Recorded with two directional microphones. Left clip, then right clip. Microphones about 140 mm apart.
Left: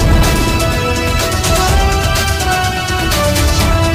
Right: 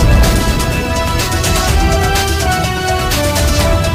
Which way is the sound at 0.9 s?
Centre (ahead or behind).